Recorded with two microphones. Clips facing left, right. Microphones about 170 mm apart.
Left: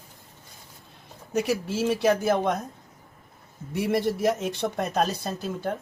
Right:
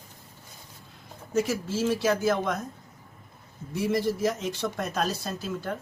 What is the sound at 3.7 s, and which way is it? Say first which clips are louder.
A man's voice: left 1 dB; 65° left (ahead or behind).